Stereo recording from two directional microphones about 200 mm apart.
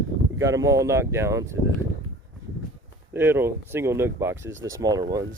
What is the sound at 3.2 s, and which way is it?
Speech, 10° right (ahead or behind).